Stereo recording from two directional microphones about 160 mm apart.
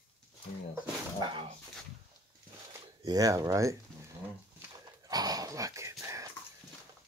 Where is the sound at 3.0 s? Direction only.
25° right (ahead or behind).